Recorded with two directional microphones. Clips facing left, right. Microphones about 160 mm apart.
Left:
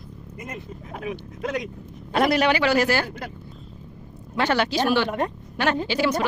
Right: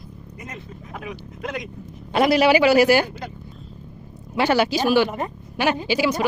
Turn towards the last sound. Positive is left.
turn(degrees=-10)  # may be behind; listen again after turning